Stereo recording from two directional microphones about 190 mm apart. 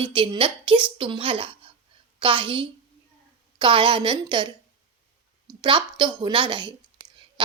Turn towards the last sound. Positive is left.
turn(degrees=-25)  # may be behind; listen again after turning